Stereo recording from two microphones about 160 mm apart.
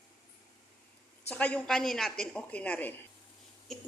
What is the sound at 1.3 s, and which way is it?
A woman's voice, 10° left (ahead or behind).